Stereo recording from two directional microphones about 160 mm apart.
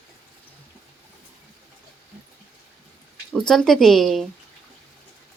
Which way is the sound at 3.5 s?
Centre (ahead or behind).